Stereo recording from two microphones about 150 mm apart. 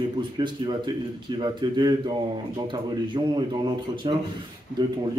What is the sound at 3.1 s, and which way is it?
Speech, 30° right (ahead or behind).